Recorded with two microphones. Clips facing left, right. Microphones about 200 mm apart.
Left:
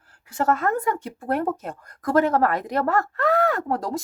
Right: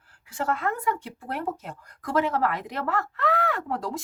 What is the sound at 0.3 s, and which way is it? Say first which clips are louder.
A woman's voice: left 5 dB; 45° left (ahead or behind).